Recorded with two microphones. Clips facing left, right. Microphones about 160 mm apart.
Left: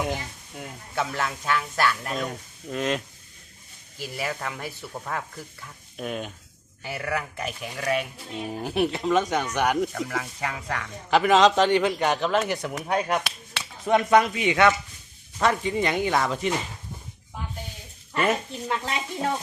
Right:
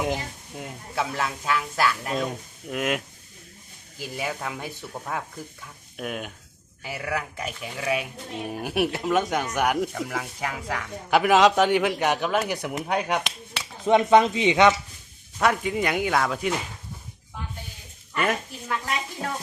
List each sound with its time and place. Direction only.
0.0 s speech: 15° right (ahead or behind)
0.9 s speech: 5° right (ahead or behind)
4.2 s speech: 5° right (ahead or behind)
15.4 s speech: 5° right (ahead or behind)
18.1 s speech: 30° left (ahead or behind)